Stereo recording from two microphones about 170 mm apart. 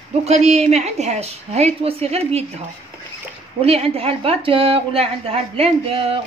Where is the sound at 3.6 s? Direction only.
35° right (ahead or behind).